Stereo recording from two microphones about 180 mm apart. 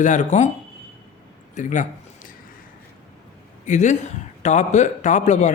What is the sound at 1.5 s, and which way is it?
Speech, 45° left (ahead or behind).